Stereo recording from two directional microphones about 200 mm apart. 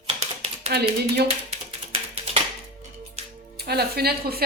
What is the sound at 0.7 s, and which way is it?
Speech, 55° right (ahead or behind).